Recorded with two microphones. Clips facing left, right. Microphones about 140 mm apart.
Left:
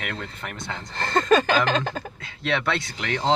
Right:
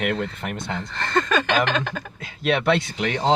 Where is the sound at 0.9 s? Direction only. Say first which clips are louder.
Left 3 dB; 35° left (ahead or behind).